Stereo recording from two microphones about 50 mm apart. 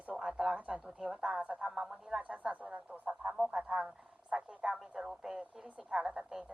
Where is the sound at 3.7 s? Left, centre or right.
Right.